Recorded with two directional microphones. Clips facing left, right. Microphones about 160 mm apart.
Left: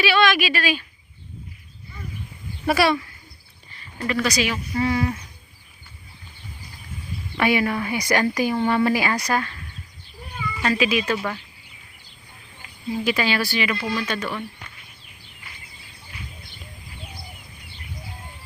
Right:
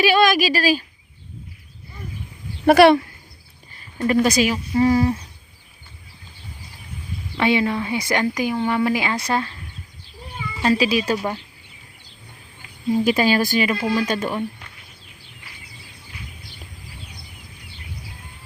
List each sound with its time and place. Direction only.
0.0 s speech: 45° right (ahead or behind)
2.6 s speech: 60° right (ahead or behind)
3.9 s speech: 40° right (ahead or behind)
4.5 s speech: 35° right (ahead or behind)
7.3 s speech: 20° right (ahead or behind)
10.5 s speech: 30° right (ahead or behind)
12.9 s speech: 40° right (ahead or behind)